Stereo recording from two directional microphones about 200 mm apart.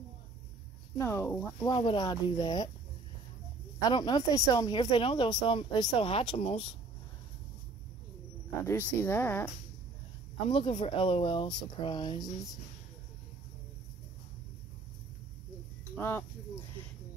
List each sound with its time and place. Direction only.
0.9 s speech: 15° left (ahead or behind)
1.7 s speech: 25° left (ahead or behind)
3.8 s speech: 20° left (ahead or behind)
8.6 s speech: 10° left (ahead or behind)
10.5 s speech: 25° left (ahead or behind)
16.0 s speech: 10° left (ahead or behind)